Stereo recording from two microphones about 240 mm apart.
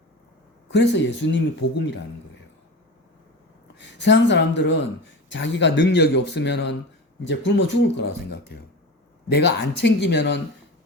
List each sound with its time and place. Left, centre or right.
0.7 s a man's voice: left
3.8 s a man's voice: left